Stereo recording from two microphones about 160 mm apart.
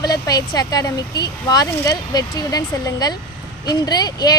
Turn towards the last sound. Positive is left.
turn(degrees=25)  # may be behind; listen again after turning